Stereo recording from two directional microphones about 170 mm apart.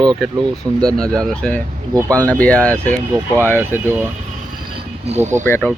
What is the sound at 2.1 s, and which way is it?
Speech, 10° left (ahead or behind).